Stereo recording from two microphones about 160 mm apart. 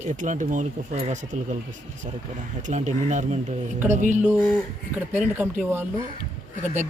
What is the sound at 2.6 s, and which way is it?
Speech, 50° right (ahead or behind).